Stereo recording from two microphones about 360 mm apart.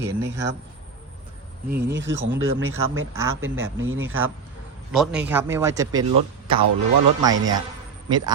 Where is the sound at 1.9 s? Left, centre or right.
Right.